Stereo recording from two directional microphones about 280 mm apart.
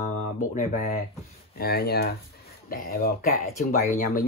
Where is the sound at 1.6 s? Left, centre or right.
Left.